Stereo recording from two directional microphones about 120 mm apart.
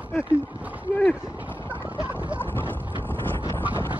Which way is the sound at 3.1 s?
15° left (ahead or behind).